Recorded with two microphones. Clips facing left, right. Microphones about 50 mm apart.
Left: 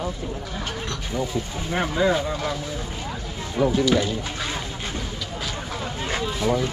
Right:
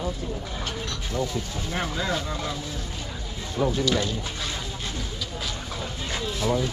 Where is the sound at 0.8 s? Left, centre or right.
Centre.